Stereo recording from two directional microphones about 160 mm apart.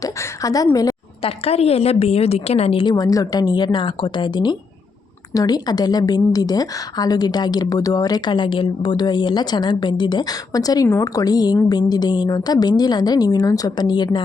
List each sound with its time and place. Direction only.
0.0 s a woman's voice: 20° left (ahead or behind)
1.2 s a woman's voice: 40° left (ahead or behind)
2.9 s a woman's voice: 20° left (ahead or behind)